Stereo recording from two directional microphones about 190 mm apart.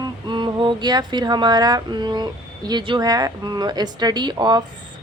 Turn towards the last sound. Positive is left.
turn(degrees=-25)  # may be behind; listen again after turning